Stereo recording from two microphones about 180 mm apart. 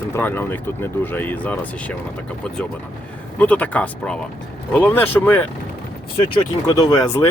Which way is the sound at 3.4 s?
10° left (ahead or behind).